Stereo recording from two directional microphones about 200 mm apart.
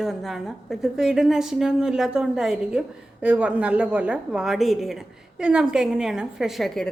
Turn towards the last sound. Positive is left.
turn(degrees=0)  # may be behind; listen again after turning